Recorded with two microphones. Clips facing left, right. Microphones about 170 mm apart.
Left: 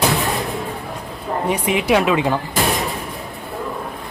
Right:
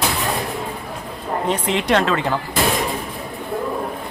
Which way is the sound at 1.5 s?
10° left (ahead or behind).